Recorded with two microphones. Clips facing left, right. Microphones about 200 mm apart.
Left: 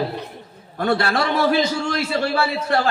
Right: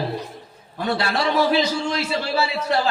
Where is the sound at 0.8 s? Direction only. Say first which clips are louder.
Left 3 dB; 55° left (ahead or behind).